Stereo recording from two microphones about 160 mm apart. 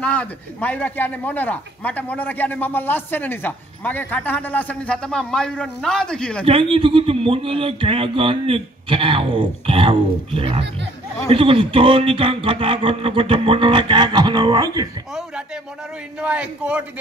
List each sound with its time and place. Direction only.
0.0 s a man's voice: 10° left (ahead or behind)
6.4 s speech: 35° right (ahead or behind)
16.2 s a man's voice: 5° right (ahead or behind)